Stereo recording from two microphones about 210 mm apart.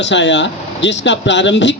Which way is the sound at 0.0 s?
60° left (ahead or behind).